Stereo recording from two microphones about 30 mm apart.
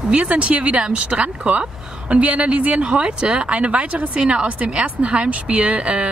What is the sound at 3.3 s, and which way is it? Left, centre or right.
A woman's voice, right.